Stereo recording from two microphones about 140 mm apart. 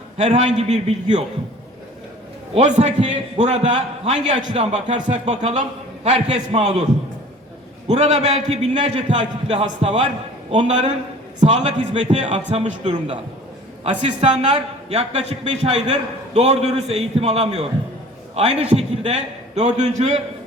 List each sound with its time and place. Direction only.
0.2 s a man's voice: 55° right (ahead or behind)
2.6 s a man's voice: 55° right (ahead or behind)
7.9 s a man's voice: 50° right (ahead or behind)
9.1 s a man's voice: 55° right (ahead or behind)
9.6 s speech: 40° right (ahead or behind)
11.3 s a man's voice: 55° right (ahead or behind)
12.5 s a man's voice: 40° right (ahead or behind)